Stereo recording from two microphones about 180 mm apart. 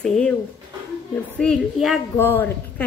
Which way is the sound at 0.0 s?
5° left (ahead or behind).